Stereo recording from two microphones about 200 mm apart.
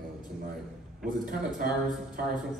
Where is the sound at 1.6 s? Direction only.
45° right (ahead or behind).